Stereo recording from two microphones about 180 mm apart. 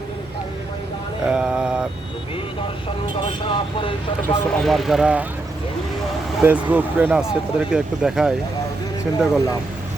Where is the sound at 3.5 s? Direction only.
30° left (ahead or behind).